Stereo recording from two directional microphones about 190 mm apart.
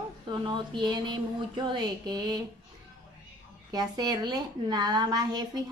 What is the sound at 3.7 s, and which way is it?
Speech, 20° right (ahead or behind).